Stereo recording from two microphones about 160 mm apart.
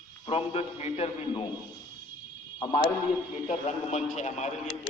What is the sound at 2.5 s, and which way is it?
Speech, 30° left (ahead or behind).